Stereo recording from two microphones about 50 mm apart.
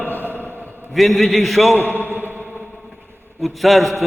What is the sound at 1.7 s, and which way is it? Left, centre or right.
Speech, left.